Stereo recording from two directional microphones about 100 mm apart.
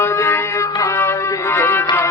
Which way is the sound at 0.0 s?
25° left (ahead or behind).